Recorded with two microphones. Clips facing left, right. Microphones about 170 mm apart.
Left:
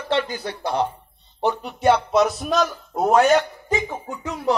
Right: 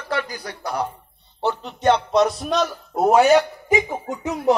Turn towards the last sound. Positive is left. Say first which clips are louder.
# right 3 dB
turn(degrees=-20)  # may be behind; listen again after turning